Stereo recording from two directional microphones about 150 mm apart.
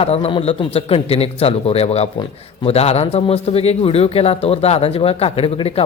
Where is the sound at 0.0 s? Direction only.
40° left (ahead or behind).